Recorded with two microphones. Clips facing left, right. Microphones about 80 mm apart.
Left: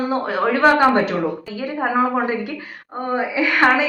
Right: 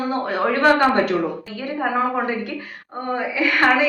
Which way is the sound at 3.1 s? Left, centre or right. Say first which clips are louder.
Left 1 dB; centre.